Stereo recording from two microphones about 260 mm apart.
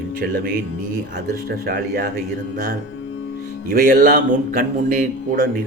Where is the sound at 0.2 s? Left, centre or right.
Right.